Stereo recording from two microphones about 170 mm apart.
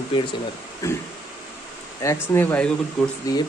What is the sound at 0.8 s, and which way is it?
Speech, 20° left (ahead or behind).